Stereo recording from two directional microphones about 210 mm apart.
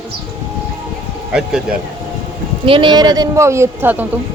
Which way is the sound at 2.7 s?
25° right (ahead or behind).